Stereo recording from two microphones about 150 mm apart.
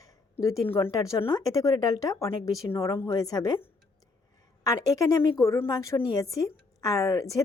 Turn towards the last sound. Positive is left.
turn(degrees=20)  # may be behind; listen again after turning